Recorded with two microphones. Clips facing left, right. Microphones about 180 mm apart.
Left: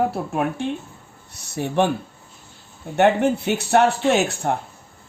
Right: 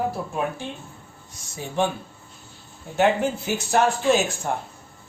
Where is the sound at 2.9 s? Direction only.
65° left (ahead or behind).